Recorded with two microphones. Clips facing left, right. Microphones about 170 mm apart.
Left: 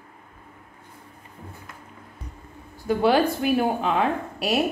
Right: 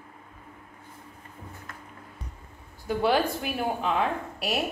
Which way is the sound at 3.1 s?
90° left.